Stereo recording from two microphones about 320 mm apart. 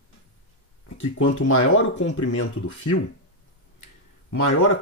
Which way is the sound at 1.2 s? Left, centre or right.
Left.